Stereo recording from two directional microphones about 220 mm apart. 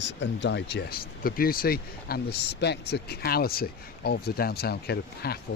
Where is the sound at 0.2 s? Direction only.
55° left (ahead or behind).